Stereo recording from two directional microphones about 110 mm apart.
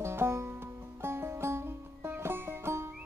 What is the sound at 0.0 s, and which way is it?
Music, 25° right (ahead or behind).